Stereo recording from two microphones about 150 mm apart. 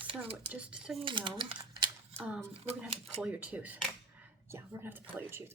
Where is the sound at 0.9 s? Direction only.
35° right (ahead or behind).